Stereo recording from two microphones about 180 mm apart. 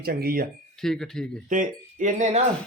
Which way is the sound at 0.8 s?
Centre (ahead or behind).